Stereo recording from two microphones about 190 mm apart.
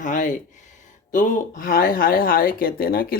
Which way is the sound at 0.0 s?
40° left (ahead or behind).